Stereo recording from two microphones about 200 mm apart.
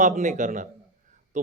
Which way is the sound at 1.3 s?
35° right (ahead or behind).